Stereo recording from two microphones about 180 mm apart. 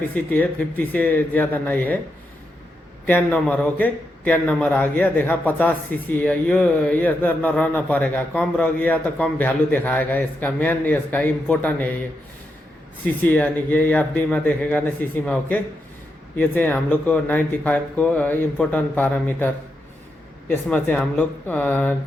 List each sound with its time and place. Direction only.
0.0 s a man's voice: 10° left (ahead or behind)
3.1 s a man's voice: 10° left (ahead or behind)
13.1 s a man's voice: 10° left (ahead or behind)
20.5 s a man's voice: 10° left (ahead or behind)